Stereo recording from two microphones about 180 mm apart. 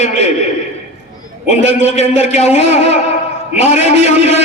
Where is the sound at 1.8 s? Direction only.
35° left (ahead or behind).